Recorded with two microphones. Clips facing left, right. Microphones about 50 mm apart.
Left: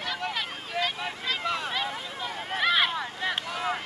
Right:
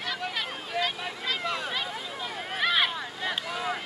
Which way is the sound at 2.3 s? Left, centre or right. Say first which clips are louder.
Left 1 dB; centre.